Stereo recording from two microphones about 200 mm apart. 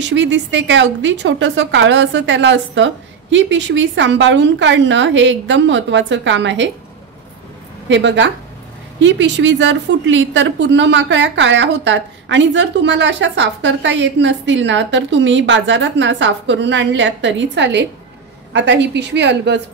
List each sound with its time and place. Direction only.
0.0 s a woman's voice: 65° right (ahead or behind)
7.9 s a woman's voice: 65° right (ahead or behind)